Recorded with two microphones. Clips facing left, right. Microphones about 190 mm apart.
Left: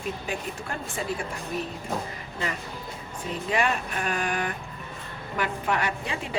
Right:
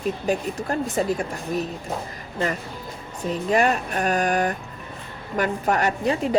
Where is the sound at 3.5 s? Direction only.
45° right (ahead or behind).